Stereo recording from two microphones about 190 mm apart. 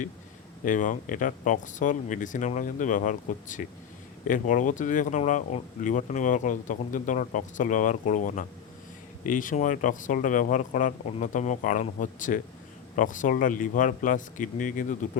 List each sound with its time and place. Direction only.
0.6 s speech: 45° left (ahead or behind)